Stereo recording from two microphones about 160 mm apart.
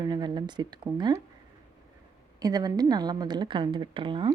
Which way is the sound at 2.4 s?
25° right (ahead or behind).